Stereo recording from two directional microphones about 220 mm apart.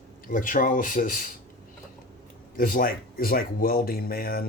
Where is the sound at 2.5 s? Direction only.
40° left (ahead or behind).